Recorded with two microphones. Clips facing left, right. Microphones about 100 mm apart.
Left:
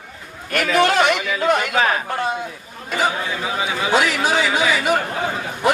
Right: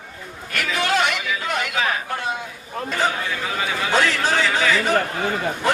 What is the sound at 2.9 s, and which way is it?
A man's voice, 10° left (ahead or behind).